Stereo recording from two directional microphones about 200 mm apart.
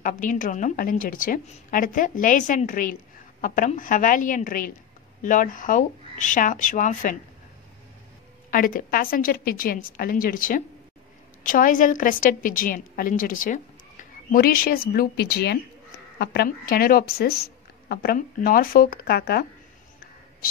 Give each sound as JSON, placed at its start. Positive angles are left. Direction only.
{"t": 0.0, "sound": "a woman's voice", "side_deg": 40}
{"t": 8.5, "sound": "a woman's voice", "side_deg": 45}